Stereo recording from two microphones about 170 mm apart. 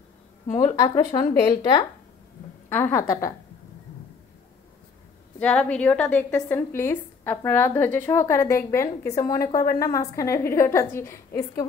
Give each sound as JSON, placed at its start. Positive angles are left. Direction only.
{"t": 0.6, "sound": "speech", "side_deg": 25}
{"t": 2.7, "sound": "a woman's voice", "side_deg": 15}
{"t": 5.4, "sound": "a woman's voice", "side_deg": 5}